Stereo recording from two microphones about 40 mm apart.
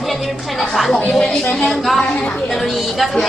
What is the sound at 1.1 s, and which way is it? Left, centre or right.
A woman's voice, centre.